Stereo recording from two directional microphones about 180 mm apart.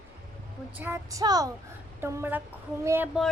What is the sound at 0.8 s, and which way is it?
A woman's voice, 15° right (ahead or behind).